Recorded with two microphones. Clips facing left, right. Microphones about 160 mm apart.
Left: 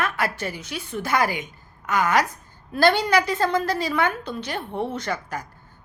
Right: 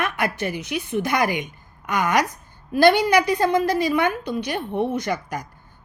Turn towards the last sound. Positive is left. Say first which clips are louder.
# right 3 dB
turn(degrees=-15)  # may be behind; listen again after turning